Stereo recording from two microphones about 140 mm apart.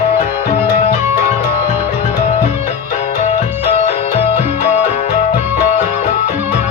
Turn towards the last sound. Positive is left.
turn(degrees=60)  # may be behind; listen again after turning